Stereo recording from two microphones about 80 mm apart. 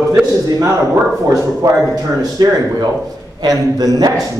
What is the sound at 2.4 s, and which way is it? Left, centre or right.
A man's voice, right.